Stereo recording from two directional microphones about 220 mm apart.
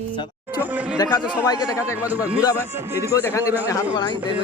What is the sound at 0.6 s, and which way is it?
Speech, 5° right (ahead or behind).